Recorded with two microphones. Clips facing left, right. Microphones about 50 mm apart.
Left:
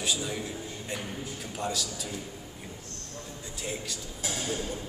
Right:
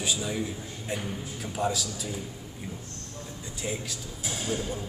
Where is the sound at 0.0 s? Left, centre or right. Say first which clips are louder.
Right 1 dB; centre.